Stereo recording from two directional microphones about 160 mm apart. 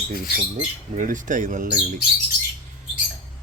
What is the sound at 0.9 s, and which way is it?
Speech, 55° right (ahead or behind).